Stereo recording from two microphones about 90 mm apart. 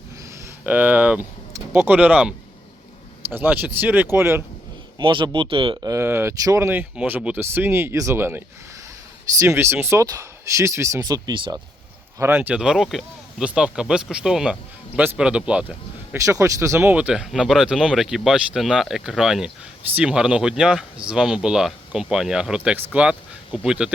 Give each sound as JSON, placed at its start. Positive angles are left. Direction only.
{"t": 0.6, "sound": "speech", "side_deg": -15}
{"t": 4.9, "sound": "speech", "side_deg": -60}
{"t": 5.7, "sound": "speech", "side_deg": -45}
{"t": 6.0, "sound": "speech", "side_deg": -30}
{"t": 6.9, "sound": "speech", "side_deg": -10}
{"t": 7.3, "sound": "speech", "side_deg": -25}
{"t": 11.0, "sound": "speech", "side_deg": -50}
{"t": 12.2, "sound": "speech", "side_deg": -20}
{"t": 12.5, "sound": "speech", "side_deg": -5}
{"t": 16.1, "sound": "speech", "side_deg": -35}
{"t": 16.9, "sound": "speech", "side_deg": -15}